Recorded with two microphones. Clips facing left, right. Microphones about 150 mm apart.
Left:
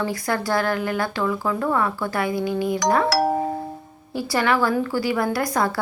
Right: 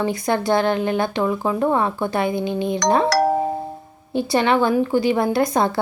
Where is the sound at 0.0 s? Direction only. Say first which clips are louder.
Right 4 dB; 20° right (ahead or behind).